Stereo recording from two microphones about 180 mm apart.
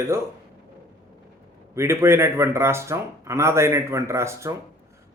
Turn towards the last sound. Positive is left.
turn(degrees=-15)  # may be behind; listen again after turning